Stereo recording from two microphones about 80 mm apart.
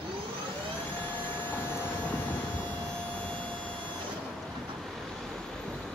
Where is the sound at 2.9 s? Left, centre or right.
Centre.